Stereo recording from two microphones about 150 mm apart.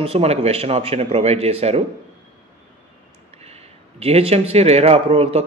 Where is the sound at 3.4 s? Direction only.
45° right (ahead or behind).